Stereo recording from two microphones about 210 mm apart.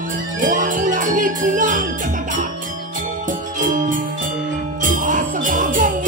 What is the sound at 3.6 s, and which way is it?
Jingle bell, 40° right (ahead or behind).